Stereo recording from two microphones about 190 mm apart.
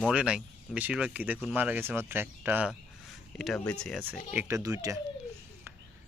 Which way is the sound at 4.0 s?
10° right (ahead or behind).